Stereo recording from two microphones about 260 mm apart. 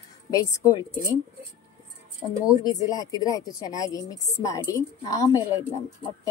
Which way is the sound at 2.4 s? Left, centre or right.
Centre.